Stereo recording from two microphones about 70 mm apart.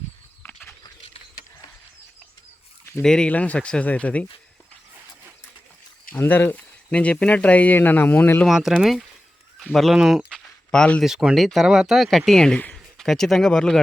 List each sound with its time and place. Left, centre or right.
0.4 s a sound: left
3.0 s speech: centre
3.2 s speech: centre
6.1 s speech: left
8.4 s speech: centre
10.4 s a sound: centre
11.0 s speech: centre